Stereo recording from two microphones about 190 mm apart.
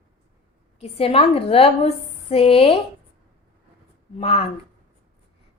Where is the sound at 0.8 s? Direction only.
30° left (ahead or behind).